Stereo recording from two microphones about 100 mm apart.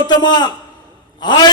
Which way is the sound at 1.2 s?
45° left (ahead or behind).